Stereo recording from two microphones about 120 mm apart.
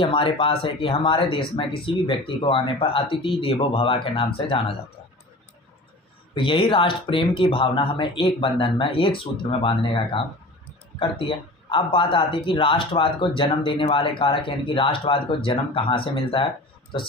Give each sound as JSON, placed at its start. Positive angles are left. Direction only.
{"t": 0.0, "sound": "speech", "side_deg": 45}
{"t": 6.3, "sound": "speech", "side_deg": 45}